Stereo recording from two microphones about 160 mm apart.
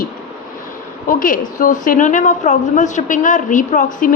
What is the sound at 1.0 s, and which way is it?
A woman's voice, 55° left (ahead or behind).